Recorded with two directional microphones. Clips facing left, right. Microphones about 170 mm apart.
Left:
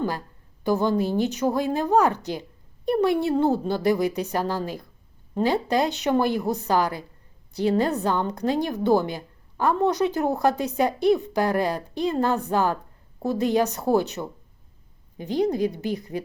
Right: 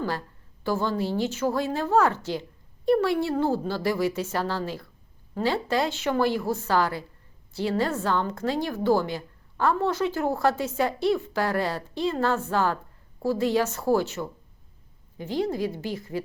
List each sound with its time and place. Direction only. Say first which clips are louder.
0.6 s a woman's voice: left 4 dB; 15° left (ahead or behind)